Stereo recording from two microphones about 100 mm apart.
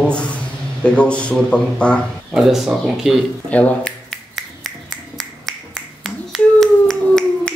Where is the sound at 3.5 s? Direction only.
10° left (ahead or behind).